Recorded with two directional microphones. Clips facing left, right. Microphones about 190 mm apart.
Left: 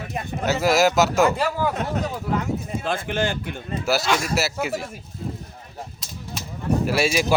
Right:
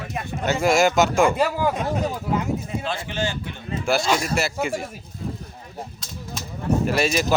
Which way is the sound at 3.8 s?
5° left (ahead or behind).